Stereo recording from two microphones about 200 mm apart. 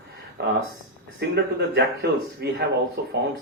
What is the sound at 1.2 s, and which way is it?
A man's voice, 55° right (ahead or behind).